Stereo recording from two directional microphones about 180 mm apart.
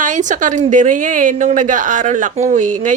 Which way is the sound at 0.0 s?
45° right (ahead or behind).